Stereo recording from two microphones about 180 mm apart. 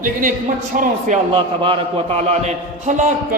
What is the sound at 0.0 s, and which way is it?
A man's voice, 50° right (ahead or behind).